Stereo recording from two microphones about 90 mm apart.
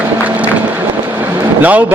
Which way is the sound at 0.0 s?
15° right (ahead or behind).